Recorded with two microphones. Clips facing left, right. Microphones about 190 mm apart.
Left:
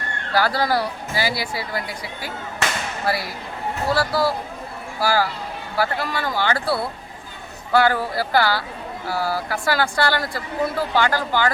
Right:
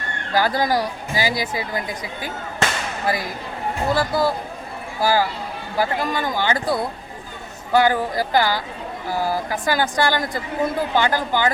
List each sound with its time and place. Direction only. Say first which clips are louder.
0.3 s speech: right 1 dB; 15° right (ahead or behind)